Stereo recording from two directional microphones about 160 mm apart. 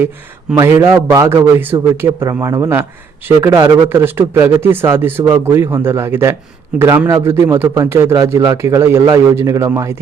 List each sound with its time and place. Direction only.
0.5 s speech: 20° right (ahead or behind)